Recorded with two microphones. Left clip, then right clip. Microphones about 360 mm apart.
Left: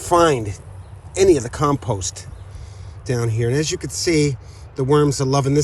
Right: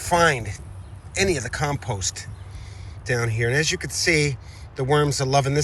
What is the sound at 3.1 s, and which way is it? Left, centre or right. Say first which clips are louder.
Speech: left 1 dB; centre.